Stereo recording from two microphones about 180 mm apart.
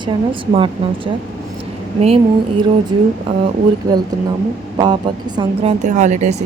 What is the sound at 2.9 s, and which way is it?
Speech, 25° right (ahead or behind).